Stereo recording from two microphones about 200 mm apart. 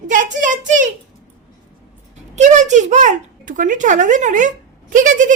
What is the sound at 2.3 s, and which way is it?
A woman's voice, 35° right (ahead or behind).